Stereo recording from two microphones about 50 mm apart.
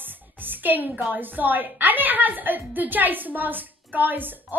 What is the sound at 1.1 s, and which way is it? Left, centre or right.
A woman's voice, right.